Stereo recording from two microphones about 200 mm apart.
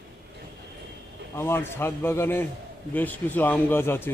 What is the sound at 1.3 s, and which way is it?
Speech, 10° left (ahead or behind).